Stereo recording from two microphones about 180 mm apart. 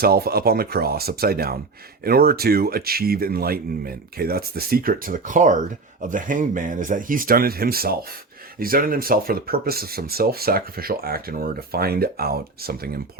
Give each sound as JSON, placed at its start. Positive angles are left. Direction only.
{"t": 0.0, "sound": "speech", "side_deg": -55}